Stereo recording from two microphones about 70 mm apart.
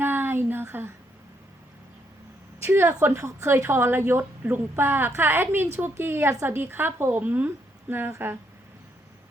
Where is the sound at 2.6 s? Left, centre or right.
Right.